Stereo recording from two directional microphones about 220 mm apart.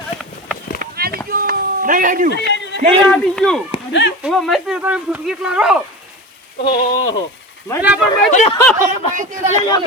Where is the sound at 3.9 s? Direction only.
55° left (ahead or behind).